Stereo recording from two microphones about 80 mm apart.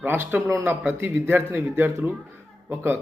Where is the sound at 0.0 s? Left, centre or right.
Right.